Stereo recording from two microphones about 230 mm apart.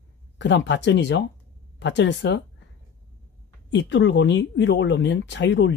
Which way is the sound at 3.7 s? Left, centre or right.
Left.